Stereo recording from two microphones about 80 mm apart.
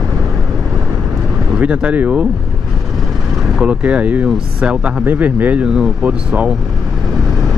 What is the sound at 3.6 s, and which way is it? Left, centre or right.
Speech, centre.